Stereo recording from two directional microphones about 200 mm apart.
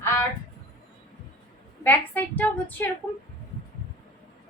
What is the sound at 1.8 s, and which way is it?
A woman's voice, 10° left (ahead or behind).